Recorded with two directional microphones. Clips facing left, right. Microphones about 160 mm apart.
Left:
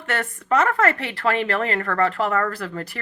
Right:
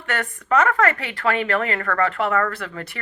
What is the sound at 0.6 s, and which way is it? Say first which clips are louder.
Speech: even; 35° left (ahead or behind).